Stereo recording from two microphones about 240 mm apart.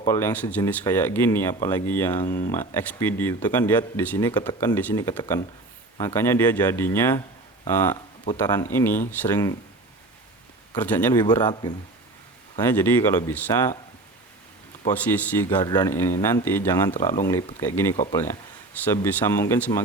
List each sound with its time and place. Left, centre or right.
0.0 s speech: centre
10.8 s speech: centre
14.8 s speech: centre
15.4 s speech: centre